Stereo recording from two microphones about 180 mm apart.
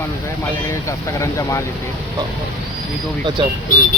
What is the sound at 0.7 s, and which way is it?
Speech, 15° left (ahead or behind).